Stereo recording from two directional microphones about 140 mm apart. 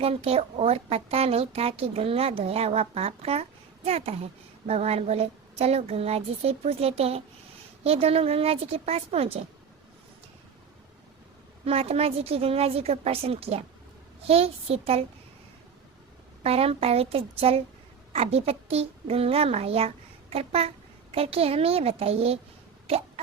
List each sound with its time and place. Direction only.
0.0 s a woman's voice: 45° right (ahead or behind)
11.6 s a woman's voice: 45° right (ahead or behind)
16.4 s a woman's voice: 45° right (ahead or behind)
22.9 s hiccup: 45° right (ahead or behind)